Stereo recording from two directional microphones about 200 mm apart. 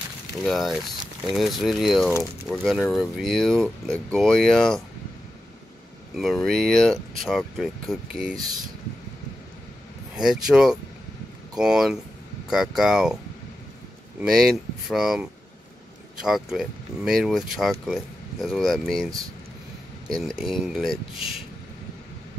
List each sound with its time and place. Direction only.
0.4 s speech: centre (ahead or behind)
6.1 s speech: centre (ahead or behind)
10.1 s speech: centre (ahead or behind)
14.2 s speech: centre (ahead or behind)
20.1 s speech: centre (ahead or behind)